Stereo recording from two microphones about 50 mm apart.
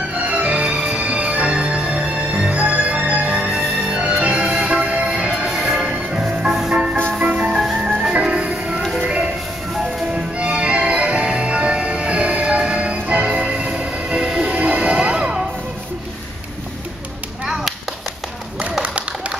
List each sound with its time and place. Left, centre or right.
0.2 s music: right
4.6 s train: right
5.5 s music: centre
7.2 s music: right
7.5 s music: centre; by 13.4 s right
13.4 s train: centre
17.5 s a sound: centre
18.6 s clapping: right